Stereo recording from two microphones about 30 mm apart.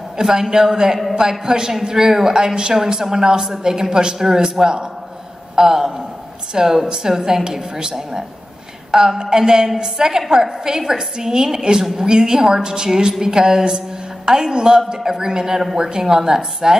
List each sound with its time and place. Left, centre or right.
0.2 s a woman's voice: centre